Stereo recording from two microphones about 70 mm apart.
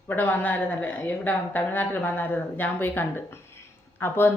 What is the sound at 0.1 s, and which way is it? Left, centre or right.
A woman's voice, left.